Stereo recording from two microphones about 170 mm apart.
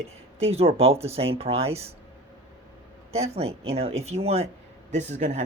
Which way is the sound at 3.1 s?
40° right (ahead or behind).